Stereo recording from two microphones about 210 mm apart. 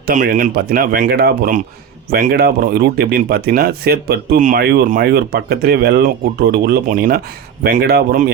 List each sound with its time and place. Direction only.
0.1 s speech: 40° right (ahead or behind)